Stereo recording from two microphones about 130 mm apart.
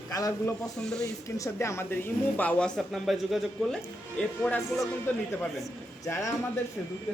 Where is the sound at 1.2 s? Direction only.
25° left (ahead or behind); by 3.8 s centre (ahead or behind).